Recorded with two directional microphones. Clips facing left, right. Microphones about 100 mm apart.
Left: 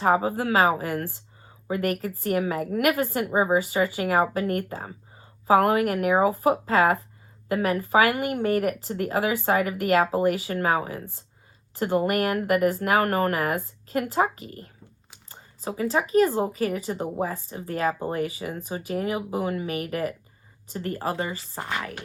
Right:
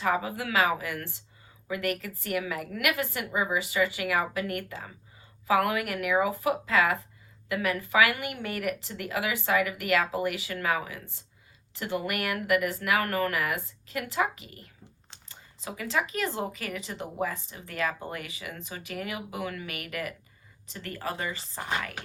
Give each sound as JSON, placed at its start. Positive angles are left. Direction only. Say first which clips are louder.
{"t": 0.0, "sound": "a woman's voice", "louder": "left 6 dB", "side_deg": 35}